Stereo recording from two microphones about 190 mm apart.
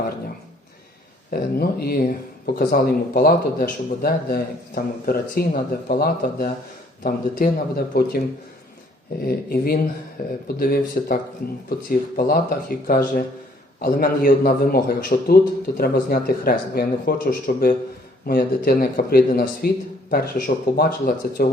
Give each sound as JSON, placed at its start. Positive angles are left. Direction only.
{"t": 1.3, "sound": "a man's voice", "side_deg": 55}
{"t": 9.2, "sound": "a man's voice", "side_deg": 50}